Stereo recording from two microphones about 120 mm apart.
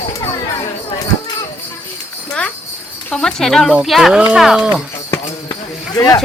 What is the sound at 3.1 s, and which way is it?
Speech, 5° left (ahead or behind).